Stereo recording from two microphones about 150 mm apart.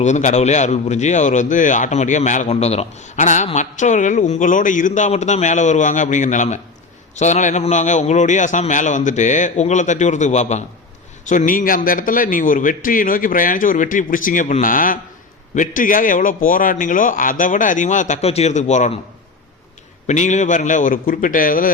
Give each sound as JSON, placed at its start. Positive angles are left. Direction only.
{"t": 0.0, "sound": "a man's voice", "side_deg": 50}
{"t": 20.1, "sound": "a man's voice", "side_deg": 50}